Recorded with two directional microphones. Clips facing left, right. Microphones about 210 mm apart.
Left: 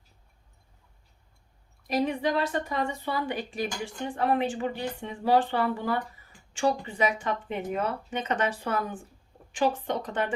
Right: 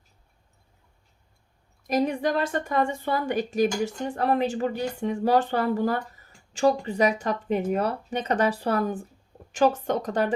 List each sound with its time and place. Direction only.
1.9 s a woman's voice: 45° right (ahead or behind)